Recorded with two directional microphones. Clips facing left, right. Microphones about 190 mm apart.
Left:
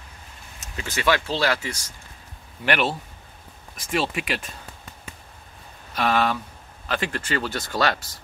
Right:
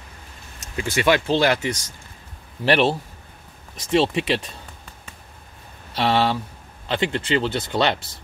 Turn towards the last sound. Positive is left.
turn(degrees=-25)  # may be behind; listen again after turning